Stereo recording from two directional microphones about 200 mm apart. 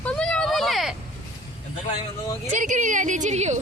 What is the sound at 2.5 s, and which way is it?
A woman's voice, 40° right (ahead or behind).